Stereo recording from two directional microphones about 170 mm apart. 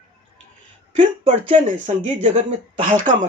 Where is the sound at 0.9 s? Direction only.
40° right (ahead or behind).